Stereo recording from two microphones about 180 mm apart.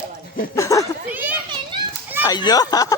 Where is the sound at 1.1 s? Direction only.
10° right (ahead or behind).